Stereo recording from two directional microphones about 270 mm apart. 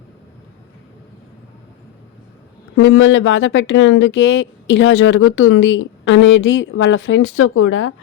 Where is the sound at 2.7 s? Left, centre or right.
Left.